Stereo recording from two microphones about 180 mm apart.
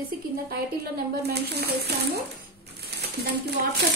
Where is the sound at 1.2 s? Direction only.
65° right (ahead or behind).